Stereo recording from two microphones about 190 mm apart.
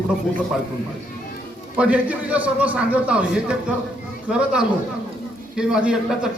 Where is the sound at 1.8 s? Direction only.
5° right (ahead or behind).